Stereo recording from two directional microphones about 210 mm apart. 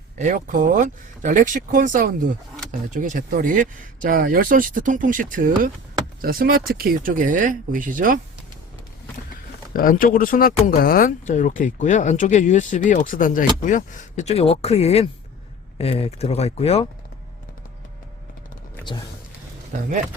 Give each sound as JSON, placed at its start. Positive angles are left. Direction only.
{"t": 0.2, "sound": "speech", "side_deg": -35}
{"t": 9.7, "sound": "speech", "side_deg": 40}